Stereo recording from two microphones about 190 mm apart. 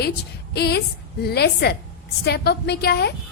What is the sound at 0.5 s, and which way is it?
A woman's voice, 55° left (ahead or behind).